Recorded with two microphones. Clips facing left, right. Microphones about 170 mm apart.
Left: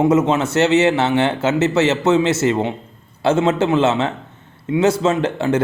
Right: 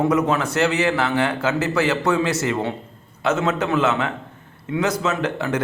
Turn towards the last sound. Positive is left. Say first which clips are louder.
# left 5 dB
turn(degrees=25)  # may be behind; listen again after turning